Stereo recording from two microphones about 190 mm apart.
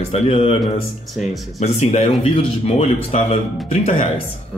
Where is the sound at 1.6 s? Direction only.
35° left (ahead or behind).